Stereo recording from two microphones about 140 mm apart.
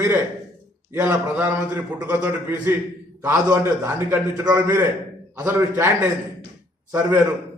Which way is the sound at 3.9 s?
20° right (ahead or behind).